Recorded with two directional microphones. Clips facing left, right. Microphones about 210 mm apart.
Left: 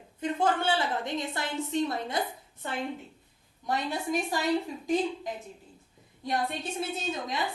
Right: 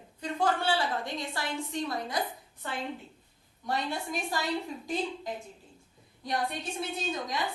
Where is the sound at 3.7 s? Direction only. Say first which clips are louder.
Left 3 dB; 20° left (ahead or behind).